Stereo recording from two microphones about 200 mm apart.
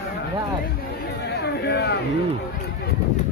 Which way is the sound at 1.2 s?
55° left (ahead or behind).